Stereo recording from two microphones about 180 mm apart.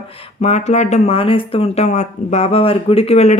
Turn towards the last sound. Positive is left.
turn(degrees=35)  # may be behind; listen again after turning